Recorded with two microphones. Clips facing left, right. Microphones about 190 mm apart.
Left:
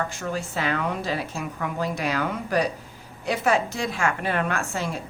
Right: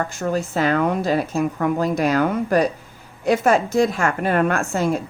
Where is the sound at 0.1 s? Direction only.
45° right (ahead or behind).